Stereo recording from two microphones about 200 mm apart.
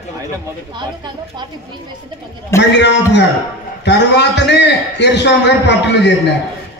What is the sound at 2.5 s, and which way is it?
A man's voice, 60° left (ahead or behind).